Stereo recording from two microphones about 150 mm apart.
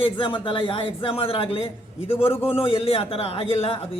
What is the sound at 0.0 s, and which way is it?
A man's voice, 35° left (ahead or behind).